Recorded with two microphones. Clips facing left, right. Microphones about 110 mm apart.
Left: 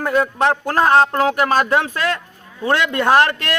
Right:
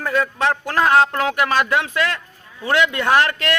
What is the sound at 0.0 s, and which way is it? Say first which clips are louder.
Speech: left 3 dB; 40° left (ahead or behind).